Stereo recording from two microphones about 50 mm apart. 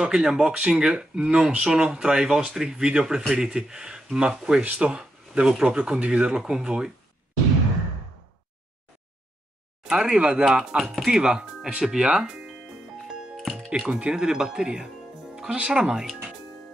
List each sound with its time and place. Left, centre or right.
0.0 s speech: centre
9.8 s speech: centre
10.8 s speech: centre
11.1 s speech: centre
13.2 s music: centre
13.7 s speech: right